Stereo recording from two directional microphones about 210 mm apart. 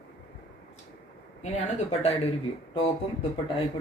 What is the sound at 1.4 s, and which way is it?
Speech, 30° left (ahead or behind).